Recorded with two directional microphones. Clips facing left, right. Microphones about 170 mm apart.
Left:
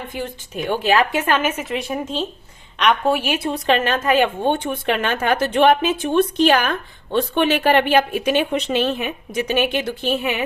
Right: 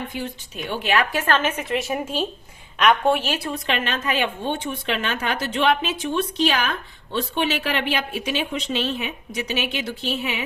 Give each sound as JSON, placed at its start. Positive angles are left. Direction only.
{"t": 0.1, "sound": "a woman's voice", "side_deg": 50}
{"t": 1.1, "sound": "a woman's voice", "side_deg": 15}
{"t": 3.2, "sound": "speech", "side_deg": 20}
{"t": 3.5, "sound": "a woman's voice", "side_deg": 45}